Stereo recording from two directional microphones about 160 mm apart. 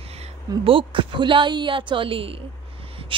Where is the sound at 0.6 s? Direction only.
30° right (ahead or behind).